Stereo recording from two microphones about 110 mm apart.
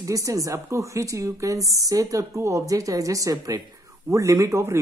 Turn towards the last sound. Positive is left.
turn(degrees=-25)  # may be behind; listen again after turning